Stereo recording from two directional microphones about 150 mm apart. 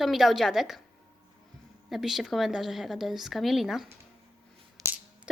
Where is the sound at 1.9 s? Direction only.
Centre (ahead or behind).